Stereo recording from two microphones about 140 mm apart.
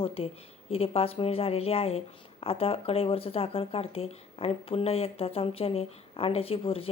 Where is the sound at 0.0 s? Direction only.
45° left (ahead or behind).